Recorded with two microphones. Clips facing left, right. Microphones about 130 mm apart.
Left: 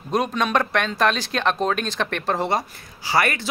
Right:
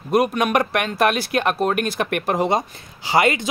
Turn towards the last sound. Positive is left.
turn(degrees=-20)  # may be behind; listen again after turning